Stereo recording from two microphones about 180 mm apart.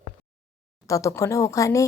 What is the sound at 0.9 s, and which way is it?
Speech, 15° left (ahead or behind).